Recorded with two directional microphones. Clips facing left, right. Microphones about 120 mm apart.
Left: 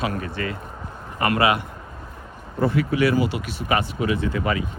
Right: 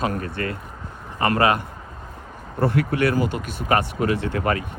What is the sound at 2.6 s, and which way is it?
Speech, 60° right (ahead or behind).